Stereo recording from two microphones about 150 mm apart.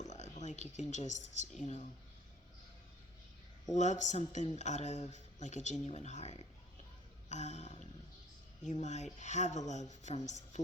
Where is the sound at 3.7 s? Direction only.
50° left (ahead or behind).